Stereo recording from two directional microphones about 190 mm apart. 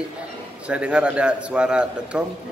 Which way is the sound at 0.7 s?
5° right (ahead or behind).